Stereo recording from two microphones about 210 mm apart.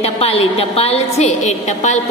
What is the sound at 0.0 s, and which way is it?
A woman's voice, 30° left (ahead or behind).